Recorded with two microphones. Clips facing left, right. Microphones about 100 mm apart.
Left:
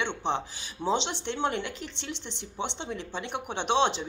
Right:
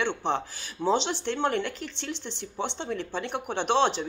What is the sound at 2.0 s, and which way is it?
A woman's voice, 20° left (ahead or behind).